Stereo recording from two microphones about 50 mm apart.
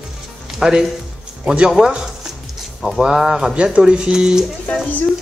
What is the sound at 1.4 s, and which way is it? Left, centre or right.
Speech, right.